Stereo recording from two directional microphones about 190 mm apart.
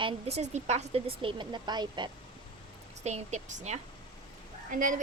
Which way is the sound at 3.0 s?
35° right (ahead or behind).